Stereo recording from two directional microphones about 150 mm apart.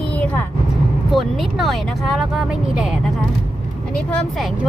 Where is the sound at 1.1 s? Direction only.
Centre (ahead or behind).